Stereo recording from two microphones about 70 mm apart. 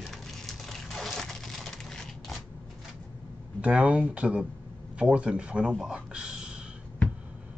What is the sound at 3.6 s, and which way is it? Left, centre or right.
Speech, centre.